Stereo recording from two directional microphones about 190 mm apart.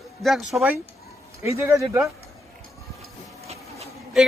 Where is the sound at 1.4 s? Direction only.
15° right (ahead or behind).